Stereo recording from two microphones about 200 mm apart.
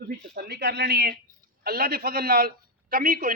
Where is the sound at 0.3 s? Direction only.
55° right (ahead or behind).